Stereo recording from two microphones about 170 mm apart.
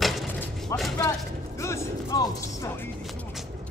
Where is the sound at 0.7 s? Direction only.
15° left (ahead or behind).